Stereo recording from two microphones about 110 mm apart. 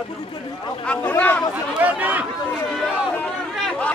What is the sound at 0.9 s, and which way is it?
Chatter, 10° left (ahead or behind).